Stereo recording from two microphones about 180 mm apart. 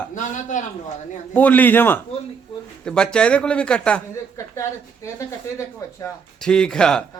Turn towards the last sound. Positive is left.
turn(degrees=5)  # may be behind; listen again after turning